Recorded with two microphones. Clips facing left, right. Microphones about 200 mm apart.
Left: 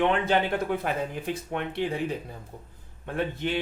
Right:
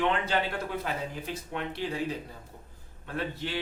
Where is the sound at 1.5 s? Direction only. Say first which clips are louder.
Left 3 dB; 55° left (ahead or behind).